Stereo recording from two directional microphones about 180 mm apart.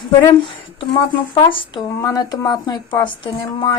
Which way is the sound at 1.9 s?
15° left (ahead or behind).